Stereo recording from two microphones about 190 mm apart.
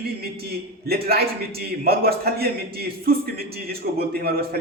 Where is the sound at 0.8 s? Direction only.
55° right (ahead or behind).